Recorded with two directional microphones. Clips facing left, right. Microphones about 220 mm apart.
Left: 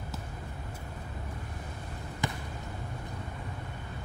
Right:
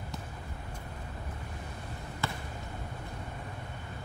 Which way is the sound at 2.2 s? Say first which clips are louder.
Left 2 dB; 15° left (ahead or behind).